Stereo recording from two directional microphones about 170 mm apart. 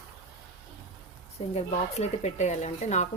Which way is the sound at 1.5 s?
40° left (ahead or behind).